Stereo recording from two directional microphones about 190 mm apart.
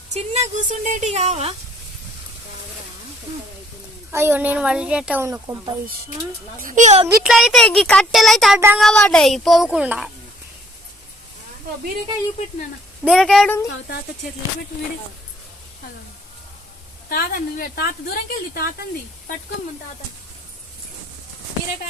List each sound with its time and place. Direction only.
0.1 s speech: 40° right (ahead or behind)
4.1 s speech: 10° right (ahead or behind)
6.6 s speech: 45° right (ahead or behind)
7.3 s speech: centre (ahead or behind)
13.1 s speech: centre (ahead or behind)
17.1 s a woman's voice: 50° left (ahead or behind)